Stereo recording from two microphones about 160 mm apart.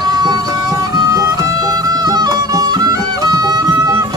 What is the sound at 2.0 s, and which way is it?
Music, 25° right (ahead or behind).